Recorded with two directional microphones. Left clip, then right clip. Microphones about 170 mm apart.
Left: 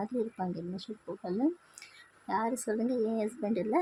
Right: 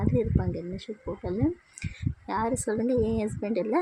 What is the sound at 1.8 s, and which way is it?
Speech, 15° right (ahead or behind).